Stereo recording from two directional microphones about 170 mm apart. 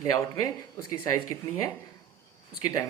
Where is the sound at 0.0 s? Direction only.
20° left (ahead or behind).